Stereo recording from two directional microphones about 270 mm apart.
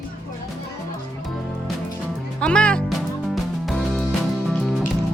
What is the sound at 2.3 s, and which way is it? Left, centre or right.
Music, centre.